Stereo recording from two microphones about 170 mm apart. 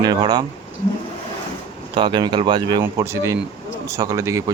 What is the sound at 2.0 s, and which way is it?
Speech, 25° right (ahead or behind).